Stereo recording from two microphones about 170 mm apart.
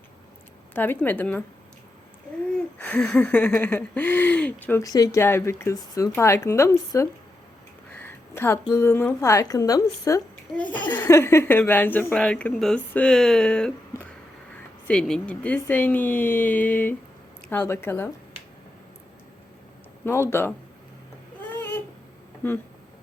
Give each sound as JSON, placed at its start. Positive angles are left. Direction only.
{"t": 0.7, "sound": "speech", "side_deg": 10}
{"t": 2.6, "sound": "speech", "side_deg": 10}
{"t": 4.8, "sound": "speech", "side_deg": 20}
{"t": 7.9, "sound": "a sound", "side_deg": 10}
{"t": 8.6, "sound": "a woman's voice", "side_deg": 15}
{"t": 20.3, "sound": "speech", "side_deg": 15}
{"t": 21.5, "sound": "babbling", "side_deg": 10}
{"t": 22.4, "sound": "speech", "side_deg": 15}